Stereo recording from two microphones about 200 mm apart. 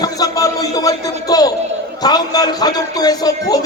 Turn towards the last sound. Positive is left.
turn(degrees=20)  # may be behind; listen again after turning